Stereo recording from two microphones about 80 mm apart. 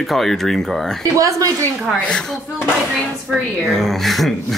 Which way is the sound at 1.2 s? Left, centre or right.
Right.